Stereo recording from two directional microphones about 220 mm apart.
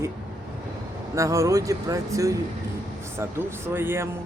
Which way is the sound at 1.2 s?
15° right (ahead or behind).